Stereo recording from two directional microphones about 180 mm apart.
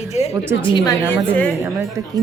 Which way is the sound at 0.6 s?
25° left (ahead or behind).